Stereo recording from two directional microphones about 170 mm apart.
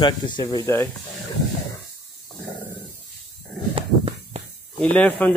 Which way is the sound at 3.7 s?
30° right (ahead or behind).